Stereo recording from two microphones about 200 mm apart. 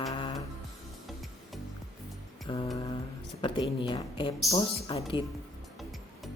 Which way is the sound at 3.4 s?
25° left (ahead or behind).